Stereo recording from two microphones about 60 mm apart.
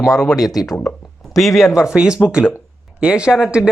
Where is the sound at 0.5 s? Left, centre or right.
Left.